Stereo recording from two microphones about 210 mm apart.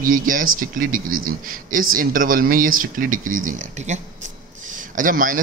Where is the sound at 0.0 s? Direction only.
40° right (ahead or behind).